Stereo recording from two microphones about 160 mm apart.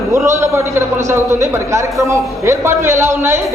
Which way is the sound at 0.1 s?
20° right (ahead or behind).